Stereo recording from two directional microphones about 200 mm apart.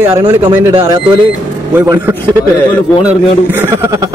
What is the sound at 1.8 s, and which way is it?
A man's voice, 10° right (ahead or behind).